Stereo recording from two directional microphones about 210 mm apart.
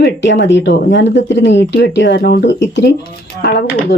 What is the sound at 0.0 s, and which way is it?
Speech, 55° left (ahead or behind).